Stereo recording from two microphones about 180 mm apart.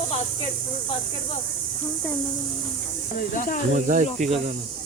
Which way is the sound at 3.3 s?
50° left (ahead or behind).